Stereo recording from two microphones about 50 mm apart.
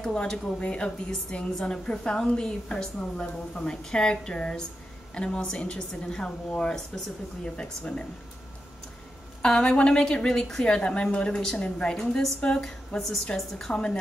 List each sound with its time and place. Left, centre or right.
0.0 s a woman's voice: centre
9.4 s a woman's voice: centre
12.0 s a woman's voice: centre
12.4 s speech: centre
12.6 s a woman's voice: centre
13.7 s a woman's voice: centre